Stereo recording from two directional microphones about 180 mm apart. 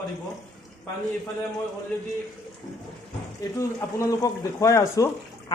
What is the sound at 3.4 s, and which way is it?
Speech, 15° left (ahead or behind).